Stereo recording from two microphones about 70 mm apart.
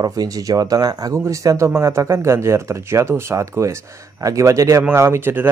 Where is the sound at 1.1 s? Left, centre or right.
Right.